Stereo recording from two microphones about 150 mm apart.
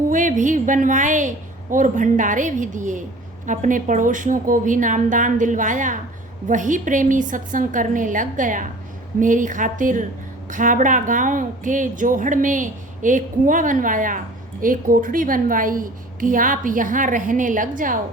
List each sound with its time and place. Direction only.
0.1 s a woman's voice: 60° right (ahead or behind)